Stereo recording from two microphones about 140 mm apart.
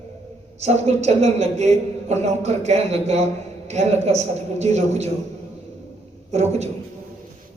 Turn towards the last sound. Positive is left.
turn(degrees=-50)  # may be behind; listen again after turning